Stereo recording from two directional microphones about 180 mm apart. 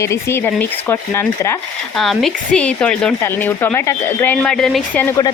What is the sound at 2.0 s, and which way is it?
Speech, centre (ahead or behind).